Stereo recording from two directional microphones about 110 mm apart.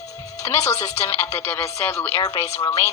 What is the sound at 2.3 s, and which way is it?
Speech, 70° left (ahead or behind).